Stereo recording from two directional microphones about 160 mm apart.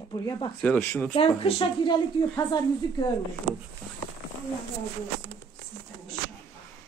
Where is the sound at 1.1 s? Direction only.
35° left (ahead or behind).